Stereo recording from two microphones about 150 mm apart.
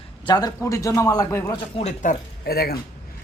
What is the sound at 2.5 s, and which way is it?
Speech, 90° left.